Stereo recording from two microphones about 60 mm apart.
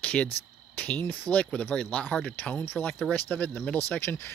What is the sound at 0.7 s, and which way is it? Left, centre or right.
Cricket, left.